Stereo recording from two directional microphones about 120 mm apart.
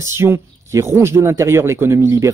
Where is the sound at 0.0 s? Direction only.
20° right (ahead or behind).